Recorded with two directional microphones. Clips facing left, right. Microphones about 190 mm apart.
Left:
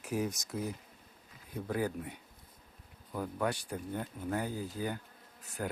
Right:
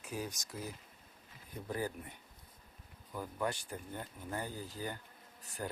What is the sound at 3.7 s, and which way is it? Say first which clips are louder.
Speech: left 6 dB; 10° left (ahead or behind).